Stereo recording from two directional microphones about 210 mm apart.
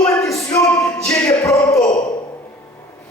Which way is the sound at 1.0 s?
15° left (ahead or behind).